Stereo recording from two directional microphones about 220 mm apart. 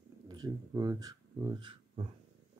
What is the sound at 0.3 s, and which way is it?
Speech, 20° right (ahead or behind).